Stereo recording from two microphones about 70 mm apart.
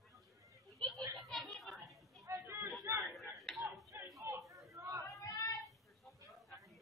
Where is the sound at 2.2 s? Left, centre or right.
Right.